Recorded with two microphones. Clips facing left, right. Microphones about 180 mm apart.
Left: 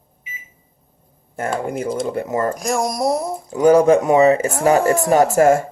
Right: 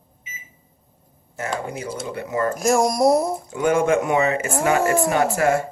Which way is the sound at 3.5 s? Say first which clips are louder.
Left 7 dB; 35° left (ahead or behind).